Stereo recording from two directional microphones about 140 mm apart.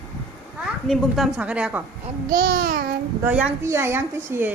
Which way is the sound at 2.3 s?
90° right.